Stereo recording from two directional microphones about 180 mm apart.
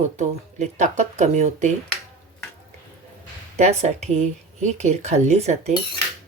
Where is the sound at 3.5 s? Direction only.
40° right (ahead or behind).